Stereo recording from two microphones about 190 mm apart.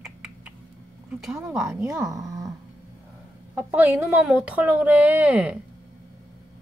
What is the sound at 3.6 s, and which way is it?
Speech, 10° right (ahead or behind).